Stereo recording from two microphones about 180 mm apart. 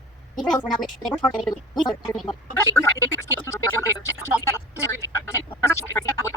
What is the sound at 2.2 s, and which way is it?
Speech, 15° left (ahead or behind).